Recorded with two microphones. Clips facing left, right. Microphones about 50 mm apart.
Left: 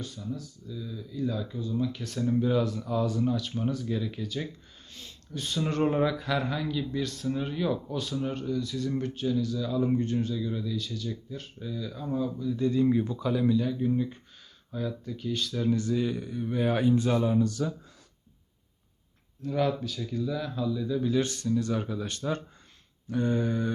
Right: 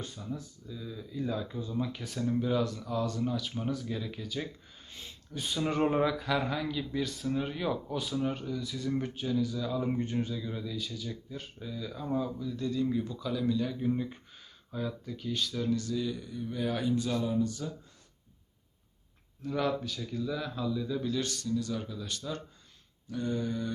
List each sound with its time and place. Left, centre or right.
0.0 s speech: right
2.1 s speech: centre
4.9 s speech: centre
12.5 s speech: left
13.6 s speech: centre
15.7 s speech: left
17.2 s a sound: left
19.4 s speech: centre
21.1 s speech: left
21.5 s speech: left